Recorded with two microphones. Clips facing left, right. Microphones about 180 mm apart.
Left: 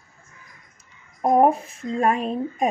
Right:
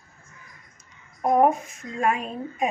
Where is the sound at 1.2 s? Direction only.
30° left (ahead or behind).